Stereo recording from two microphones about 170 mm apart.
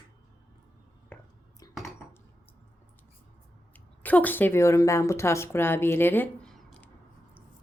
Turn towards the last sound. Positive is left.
turn(degrees=5)  # may be behind; listen again after turning